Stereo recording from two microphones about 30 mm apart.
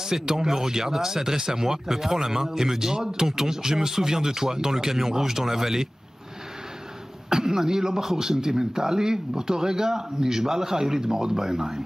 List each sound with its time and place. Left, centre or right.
0.0 s speech: centre
7.2 s speech: centre